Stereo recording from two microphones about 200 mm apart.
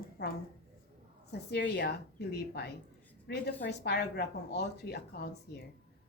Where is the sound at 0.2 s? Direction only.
55° left (ahead or behind).